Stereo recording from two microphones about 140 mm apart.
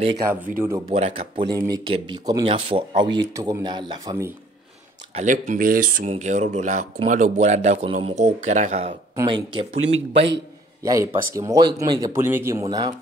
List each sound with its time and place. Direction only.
0.6 s speech: 15° right (ahead or behind)
0.9 s speech: 50° right (ahead or behind)
1.7 s speech: 30° right (ahead or behind)
2.4 s speech: 40° right (ahead or behind)
5.1 s speech: 60° right (ahead or behind); by 6.0 s 90° right
6.0 s speech: 55° right (ahead or behind)
9.1 s speech: 30° right (ahead or behind)
10.8 s speech: 25° right (ahead or behind)